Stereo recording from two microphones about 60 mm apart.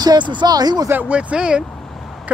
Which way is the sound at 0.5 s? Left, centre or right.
Right.